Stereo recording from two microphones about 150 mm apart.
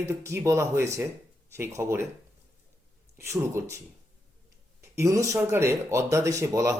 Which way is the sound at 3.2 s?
20° right (ahead or behind).